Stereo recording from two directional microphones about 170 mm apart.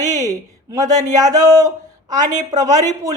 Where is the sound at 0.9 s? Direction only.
20° right (ahead or behind).